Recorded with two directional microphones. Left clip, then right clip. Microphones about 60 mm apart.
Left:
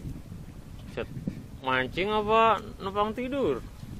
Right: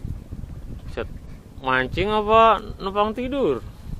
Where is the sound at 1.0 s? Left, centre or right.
Right.